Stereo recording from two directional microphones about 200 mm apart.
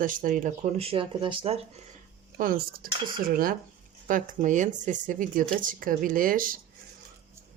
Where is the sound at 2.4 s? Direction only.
45° right (ahead or behind).